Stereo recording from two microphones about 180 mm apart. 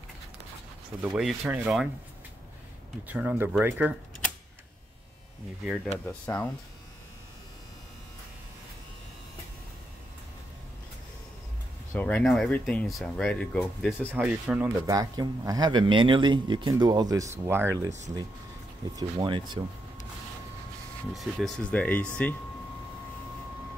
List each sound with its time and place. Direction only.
1.0 s speech: 5° right (ahead or behind)
3.1 s speech: 10° right (ahead or behind)
6.0 s speech: 10° left (ahead or behind)
11.9 s speech: 10° left (ahead or behind)
14.1 s speech: 5° right (ahead or behind)
14.9 s speech: 20° right (ahead or behind)
18.9 s speech: 25° right (ahead or behind)
21.1 s speech: centre (ahead or behind)